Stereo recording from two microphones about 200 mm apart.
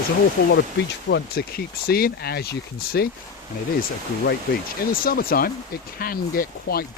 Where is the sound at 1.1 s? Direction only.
50° left (ahead or behind).